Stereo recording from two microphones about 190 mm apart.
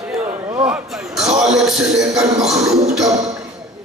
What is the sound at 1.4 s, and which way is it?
Speech, 5° right (ahead or behind).